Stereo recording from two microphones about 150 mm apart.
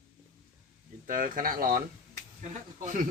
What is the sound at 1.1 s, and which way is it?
Speech, 65° right (ahead or behind).